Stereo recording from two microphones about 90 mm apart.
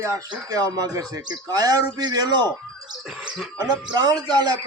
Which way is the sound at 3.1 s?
15° right (ahead or behind).